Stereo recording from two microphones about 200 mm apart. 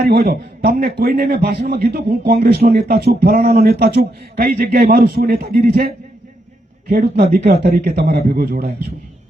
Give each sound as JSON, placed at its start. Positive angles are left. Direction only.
{"t": 0.0, "sound": "speech", "side_deg": -50}